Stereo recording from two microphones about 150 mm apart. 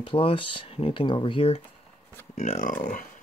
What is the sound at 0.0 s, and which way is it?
Speech, 35° left (ahead or behind).